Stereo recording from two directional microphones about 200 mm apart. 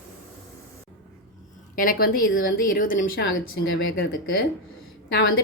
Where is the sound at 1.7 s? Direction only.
45° left (ahead or behind).